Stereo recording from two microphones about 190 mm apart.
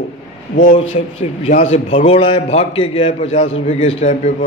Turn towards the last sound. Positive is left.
turn(degrees=40)  # may be behind; listen again after turning